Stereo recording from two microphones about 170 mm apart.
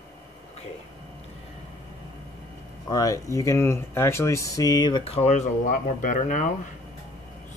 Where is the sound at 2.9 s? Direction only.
20° left (ahead or behind); by 6.7 s 45° left (ahead or behind).